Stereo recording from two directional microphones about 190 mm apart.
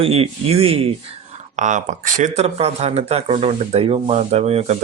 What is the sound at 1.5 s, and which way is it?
Speech, 40° right (ahead or behind).